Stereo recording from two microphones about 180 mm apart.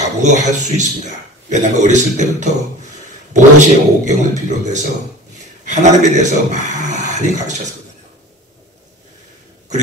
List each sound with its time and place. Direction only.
0.2 s a man's voice: 40° right (ahead or behind)